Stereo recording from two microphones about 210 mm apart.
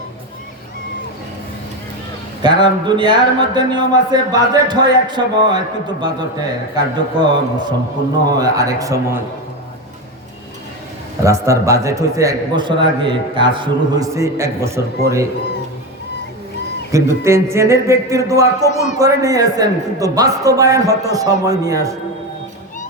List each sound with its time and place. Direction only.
2.4 s a man's voice: 20° right (ahead or behind)
11.2 s a man's voice: 15° right (ahead or behind)
16.9 s a man's voice: 15° right (ahead or behind)